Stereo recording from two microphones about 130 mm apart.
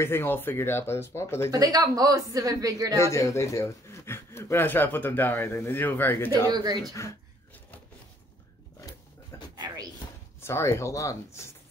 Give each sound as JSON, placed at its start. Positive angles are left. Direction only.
{"t": 0.0, "sound": "a man's voice", "side_deg": 20}
{"t": 1.5, "sound": "speech", "side_deg": -30}
{"t": 3.0, "sound": "a man's voice", "side_deg": 20}
{"t": 6.5, "sound": "speech", "side_deg": -30}
{"t": 9.3, "sound": "a sound", "side_deg": 20}
{"t": 10.4, "sound": "a man's voice", "side_deg": 20}